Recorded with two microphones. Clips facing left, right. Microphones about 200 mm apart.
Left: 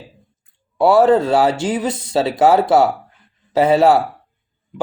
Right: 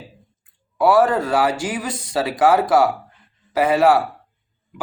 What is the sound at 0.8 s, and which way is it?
Speech, 25° left (ahead or behind).